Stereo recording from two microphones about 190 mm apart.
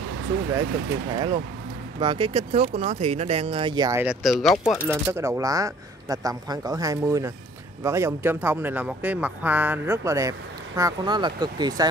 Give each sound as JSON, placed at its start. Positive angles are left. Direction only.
{"t": 1.1, "sound": "speech", "side_deg": -25}
{"t": 4.0, "sound": "speech", "side_deg": -5}